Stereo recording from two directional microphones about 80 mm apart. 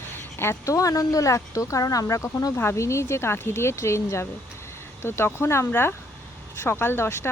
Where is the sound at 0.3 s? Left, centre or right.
Left.